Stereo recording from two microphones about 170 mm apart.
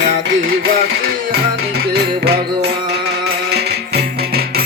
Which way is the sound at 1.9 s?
70° right (ahead or behind).